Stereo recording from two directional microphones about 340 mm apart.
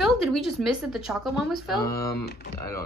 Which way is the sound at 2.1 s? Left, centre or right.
Left.